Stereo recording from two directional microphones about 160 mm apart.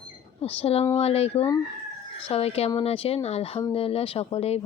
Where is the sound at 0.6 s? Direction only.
40° left (ahead or behind).